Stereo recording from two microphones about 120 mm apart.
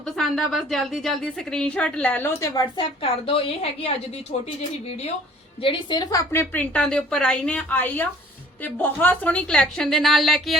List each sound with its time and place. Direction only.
0.0 s a woman's voice: 5° left (ahead or behind)
2.7 s a woman's voice: 50° left (ahead or behind)
5.6 s a woman's voice: 40° left (ahead or behind)
6.4 s a woman's voice: 15° left (ahead or behind)